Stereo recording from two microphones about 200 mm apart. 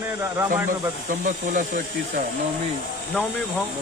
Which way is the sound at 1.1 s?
40° right (ahead or behind).